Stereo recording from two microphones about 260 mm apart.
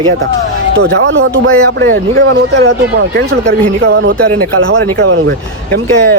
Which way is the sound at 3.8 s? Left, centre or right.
Right.